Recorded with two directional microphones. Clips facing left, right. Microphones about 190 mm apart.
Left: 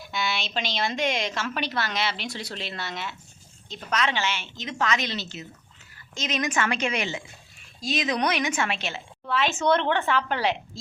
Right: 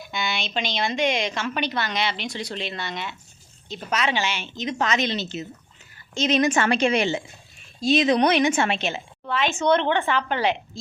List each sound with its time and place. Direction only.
0.1 s a woman's voice: centre (ahead or behind)
3.8 s a woman's voice: 10° right (ahead or behind)
9.2 s a woman's voice: centre (ahead or behind)